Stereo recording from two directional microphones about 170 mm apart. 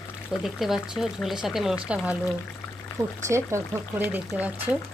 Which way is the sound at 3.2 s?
15° right (ahead or behind).